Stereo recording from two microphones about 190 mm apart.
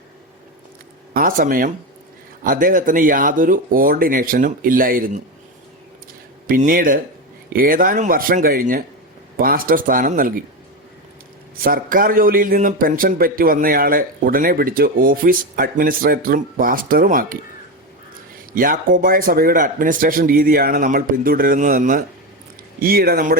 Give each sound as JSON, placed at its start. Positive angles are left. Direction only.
{"t": 1.1, "sound": "a man's voice", "side_deg": -50}
{"t": 6.5, "sound": "a man's voice", "side_deg": -50}
{"t": 11.5, "sound": "a man's voice", "side_deg": -50}
{"t": 18.5, "sound": "a man's voice", "side_deg": -45}